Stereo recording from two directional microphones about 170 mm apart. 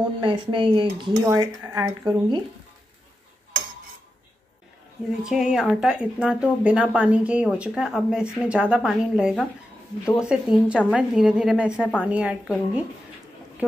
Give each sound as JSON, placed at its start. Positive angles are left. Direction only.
{"t": 0.2, "sound": "speech", "side_deg": -30}
{"t": 5.2, "sound": "a woman's voice", "side_deg": -5}